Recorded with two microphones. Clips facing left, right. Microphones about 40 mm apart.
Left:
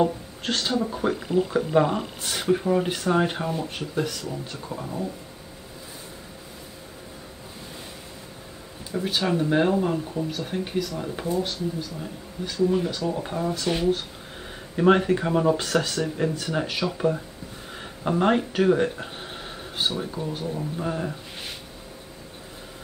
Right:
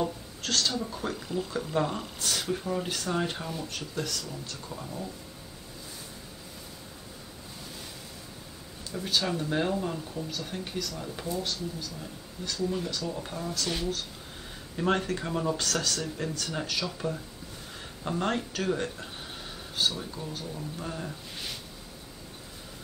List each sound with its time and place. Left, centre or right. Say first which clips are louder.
0.0 s speech: left 8 dB; left
8.9 s speech: left 5 dB; left